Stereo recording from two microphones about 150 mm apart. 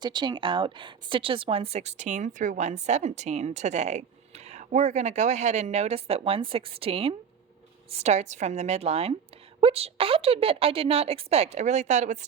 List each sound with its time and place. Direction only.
0.0 s speech: 30° right (ahead or behind); by 12.2 s 50° right (ahead or behind)